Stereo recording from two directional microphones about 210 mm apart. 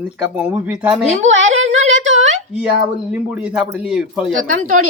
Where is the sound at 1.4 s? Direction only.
35° right (ahead or behind).